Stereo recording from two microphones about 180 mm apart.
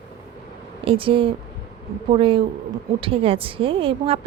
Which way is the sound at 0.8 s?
30° right (ahead or behind).